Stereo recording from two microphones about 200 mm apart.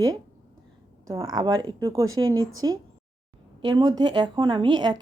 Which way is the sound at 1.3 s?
20° right (ahead or behind).